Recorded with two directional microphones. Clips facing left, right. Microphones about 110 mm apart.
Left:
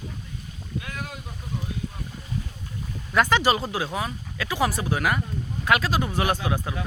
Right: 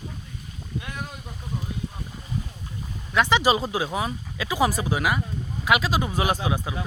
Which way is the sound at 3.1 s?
Centre (ahead or behind).